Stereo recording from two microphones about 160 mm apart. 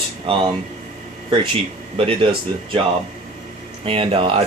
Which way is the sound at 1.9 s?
35° right (ahead or behind).